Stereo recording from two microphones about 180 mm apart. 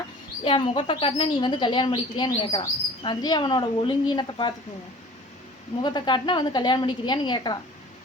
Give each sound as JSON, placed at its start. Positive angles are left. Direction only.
{"t": 0.4, "sound": "speech", "side_deg": 30}
{"t": 5.8, "sound": "speech", "side_deg": 25}